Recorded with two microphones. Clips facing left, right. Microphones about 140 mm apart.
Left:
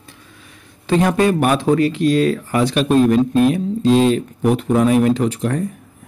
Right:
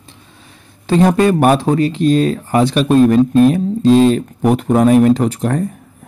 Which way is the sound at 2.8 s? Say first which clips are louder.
Right 3 dB; 40° right (ahead or behind).